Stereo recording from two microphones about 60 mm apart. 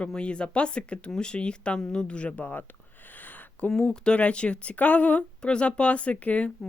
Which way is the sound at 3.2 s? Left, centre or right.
Left.